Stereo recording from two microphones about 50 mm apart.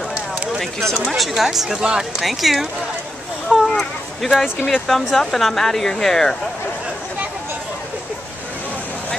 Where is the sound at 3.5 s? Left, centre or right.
Centre.